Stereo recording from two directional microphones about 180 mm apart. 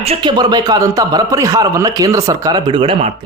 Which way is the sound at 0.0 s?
30° right (ahead or behind).